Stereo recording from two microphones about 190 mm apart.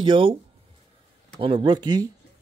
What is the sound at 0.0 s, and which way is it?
Speech, 25° right (ahead or behind).